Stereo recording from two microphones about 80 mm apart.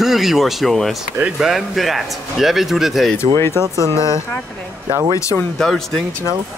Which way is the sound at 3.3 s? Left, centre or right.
Left.